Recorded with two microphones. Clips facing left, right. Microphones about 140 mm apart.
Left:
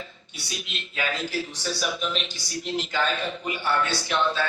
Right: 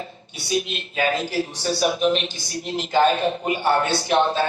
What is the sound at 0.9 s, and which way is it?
A man's voice, 45° right (ahead or behind).